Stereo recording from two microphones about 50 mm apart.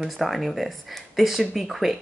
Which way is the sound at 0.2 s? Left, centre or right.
Centre.